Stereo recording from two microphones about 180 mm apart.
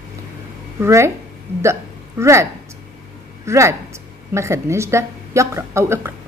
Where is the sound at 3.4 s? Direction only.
15° right (ahead or behind).